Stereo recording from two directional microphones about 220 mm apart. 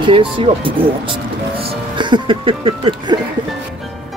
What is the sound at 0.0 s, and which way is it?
Speech, 25° right (ahead or behind).